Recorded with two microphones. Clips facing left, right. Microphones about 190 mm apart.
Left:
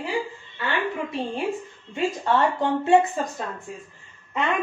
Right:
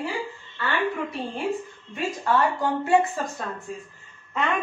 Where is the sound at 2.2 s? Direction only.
25° left (ahead or behind).